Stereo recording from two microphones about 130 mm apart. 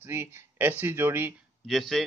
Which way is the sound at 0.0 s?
15° right (ahead or behind).